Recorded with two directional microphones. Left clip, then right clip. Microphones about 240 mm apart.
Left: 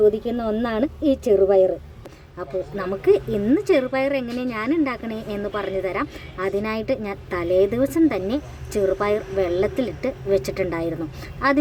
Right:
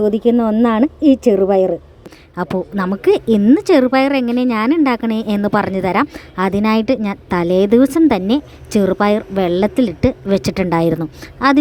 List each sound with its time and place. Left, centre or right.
0.3 s speech: right
2.3 s a woman's voice: right